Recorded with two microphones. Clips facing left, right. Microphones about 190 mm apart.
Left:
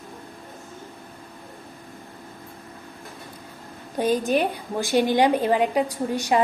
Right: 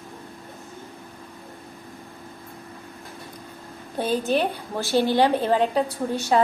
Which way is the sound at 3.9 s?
15° left (ahead or behind).